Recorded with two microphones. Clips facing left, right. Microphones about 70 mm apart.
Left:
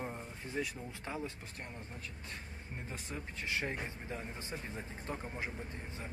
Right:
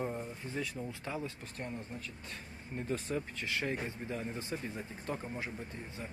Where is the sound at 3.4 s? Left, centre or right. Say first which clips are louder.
Right 2 dB; left.